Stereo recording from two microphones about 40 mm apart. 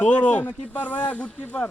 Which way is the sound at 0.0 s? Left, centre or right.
Left.